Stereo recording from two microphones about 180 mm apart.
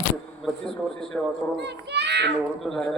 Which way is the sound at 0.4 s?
5° left (ahead or behind).